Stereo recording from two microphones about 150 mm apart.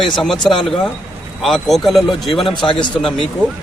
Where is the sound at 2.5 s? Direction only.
30° left (ahead or behind).